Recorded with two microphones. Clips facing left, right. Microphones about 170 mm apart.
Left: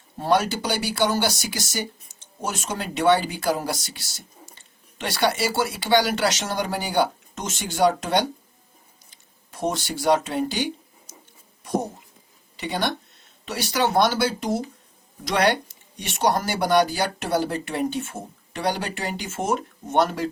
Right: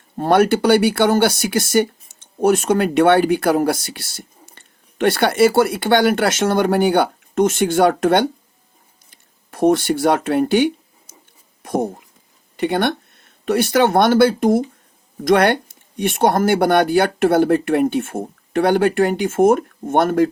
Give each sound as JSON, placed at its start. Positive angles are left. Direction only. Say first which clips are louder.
{"t": 0.2, "sound": "speech", "louder": "right 8 dB", "side_deg": -60}
{"t": 9.0, "sound": "a sound", "louder": "right 6 dB", "side_deg": -55}
{"t": 11.6, "sound": "speech", "louder": "right 5 dB", "side_deg": -55}